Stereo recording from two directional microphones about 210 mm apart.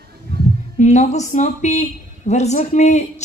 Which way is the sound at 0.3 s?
50° right (ahead or behind).